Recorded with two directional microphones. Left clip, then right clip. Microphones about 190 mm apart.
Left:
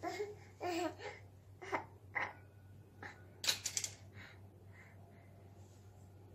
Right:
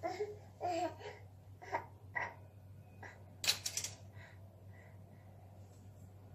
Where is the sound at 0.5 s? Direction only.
50° left (ahead or behind).